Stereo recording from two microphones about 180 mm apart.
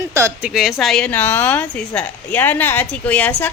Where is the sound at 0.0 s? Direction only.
15° right (ahead or behind).